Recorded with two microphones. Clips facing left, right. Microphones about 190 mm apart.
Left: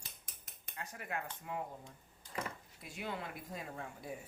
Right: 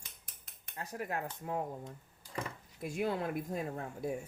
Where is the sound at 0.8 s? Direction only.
40° right (ahead or behind).